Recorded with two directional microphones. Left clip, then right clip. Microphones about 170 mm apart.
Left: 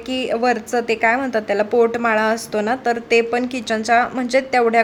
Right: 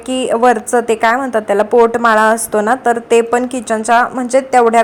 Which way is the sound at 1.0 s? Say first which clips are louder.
Right 5 dB; centre (ahead or behind).